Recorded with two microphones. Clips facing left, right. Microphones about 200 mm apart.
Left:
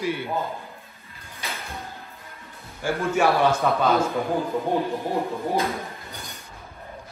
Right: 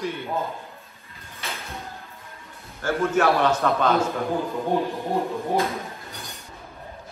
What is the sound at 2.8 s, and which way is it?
A man's voice, 10° left (ahead or behind).